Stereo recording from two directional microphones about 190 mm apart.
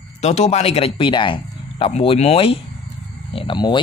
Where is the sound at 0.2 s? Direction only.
35° left (ahead or behind).